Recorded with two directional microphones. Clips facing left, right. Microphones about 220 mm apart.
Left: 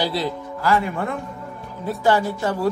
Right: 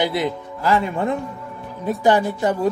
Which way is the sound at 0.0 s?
20° right (ahead or behind).